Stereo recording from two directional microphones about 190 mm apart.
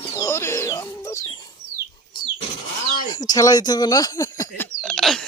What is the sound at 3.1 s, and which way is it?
Speech, 20° left (ahead or behind).